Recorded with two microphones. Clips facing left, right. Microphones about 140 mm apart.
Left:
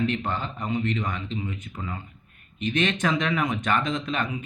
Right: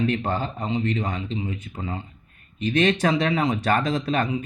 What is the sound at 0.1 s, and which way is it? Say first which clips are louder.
Speech: right 4 dB; 35° right (ahead or behind).